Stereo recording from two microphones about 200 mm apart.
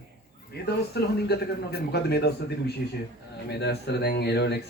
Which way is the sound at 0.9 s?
55° left (ahead or behind).